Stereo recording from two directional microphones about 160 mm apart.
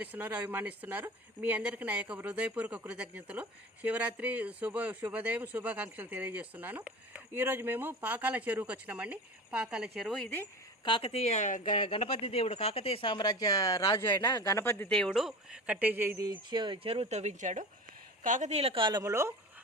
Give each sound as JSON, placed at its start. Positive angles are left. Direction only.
{"t": 0.0, "sound": "a man's voice", "side_deg": -10}
{"t": 10.8, "sound": "speech", "side_deg": 35}
{"t": 11.7, "sound": "a man's voice", "side_deg": 35}